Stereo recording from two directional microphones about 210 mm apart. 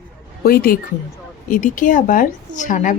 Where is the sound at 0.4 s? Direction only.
45° left (ahead or behind).